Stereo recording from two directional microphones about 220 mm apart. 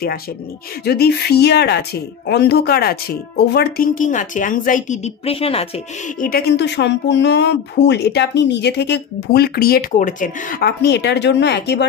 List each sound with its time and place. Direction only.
0.8 s speech: 45° left (ahead or behind); by 5.7 s 25° left (ahead or behind)
6.1 s speech: 40° left (ahead or behind)